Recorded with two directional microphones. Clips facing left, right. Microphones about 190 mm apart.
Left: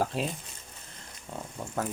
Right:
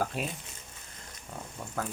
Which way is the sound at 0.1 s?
30° left (ahead or behind).